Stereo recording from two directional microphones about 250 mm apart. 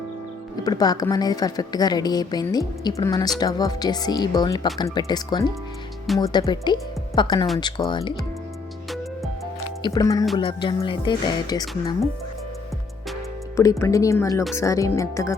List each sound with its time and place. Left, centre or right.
0.6 s a woman's voice: centre
8.9 s music: centre
9.8 s a woman's voice: centre
13.6 s a woman's voice: centre